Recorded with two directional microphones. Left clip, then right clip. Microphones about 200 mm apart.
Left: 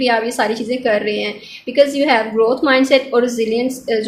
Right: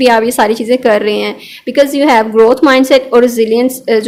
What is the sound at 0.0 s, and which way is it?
A woman's voice, 50° right (ahead or behind).